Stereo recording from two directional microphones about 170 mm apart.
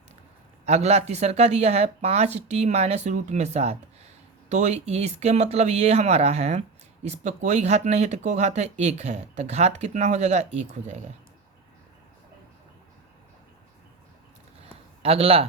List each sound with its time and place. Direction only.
0.6 s speech: 40° right (ahead or behind)
15.0 s speech: 35° right (ahead or behind)